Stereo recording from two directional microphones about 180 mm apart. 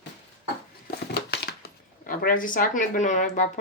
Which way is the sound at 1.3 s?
65° left (ahead or behind).